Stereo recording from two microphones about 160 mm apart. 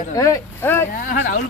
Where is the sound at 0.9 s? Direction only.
55° left (ahead or behind).